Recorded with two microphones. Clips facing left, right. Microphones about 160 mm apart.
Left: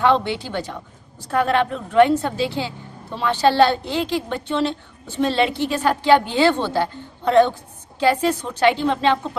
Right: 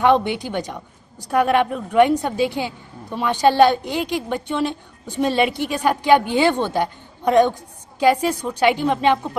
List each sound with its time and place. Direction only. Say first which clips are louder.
0.0 s a woman's voice: right 2 dB; 15° right (ahead or behind)